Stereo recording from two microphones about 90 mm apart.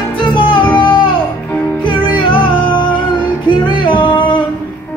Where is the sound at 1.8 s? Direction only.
65° left (ahead or behind).